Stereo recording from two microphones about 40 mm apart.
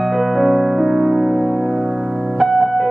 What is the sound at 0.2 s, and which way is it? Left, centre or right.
Music, centre.